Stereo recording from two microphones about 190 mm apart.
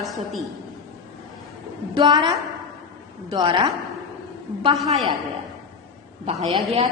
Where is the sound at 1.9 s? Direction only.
25° right (ahead or behind).